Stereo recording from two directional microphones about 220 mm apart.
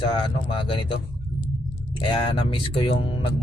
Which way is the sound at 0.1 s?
25° left (ahead or behind).